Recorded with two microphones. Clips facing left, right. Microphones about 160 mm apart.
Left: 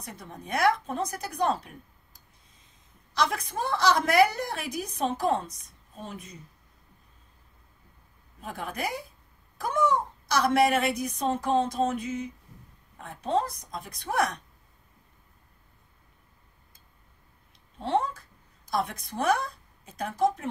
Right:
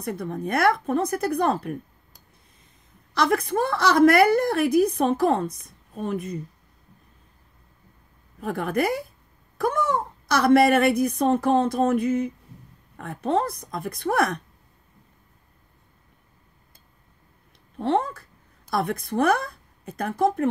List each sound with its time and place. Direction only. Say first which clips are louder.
0.0 s a woman's voice: right 13 dB; 60° right (ahead or behind)
8.4 s a woman's voice: right 10 dB; 60° right (ahead or behind)
10.2 s a woman's voice: right 7 dB; 60° right (ahead or behind)
17.7 s a woman's voice: right 4 dB; 60° right (ahead or behind)